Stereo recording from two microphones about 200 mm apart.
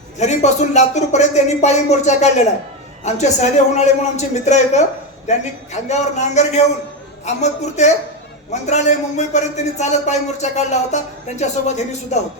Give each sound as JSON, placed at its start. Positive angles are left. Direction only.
{"t": 0.2, "sound": "a man's voice", "side_deg": 35}